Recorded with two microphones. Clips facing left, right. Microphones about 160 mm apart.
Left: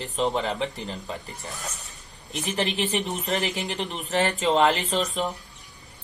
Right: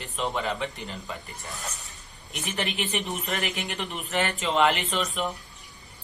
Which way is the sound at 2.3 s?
35° left (ahead or behind).